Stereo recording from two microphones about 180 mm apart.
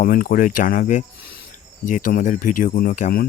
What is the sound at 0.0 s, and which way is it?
Speech, 55° left (ahead or behind).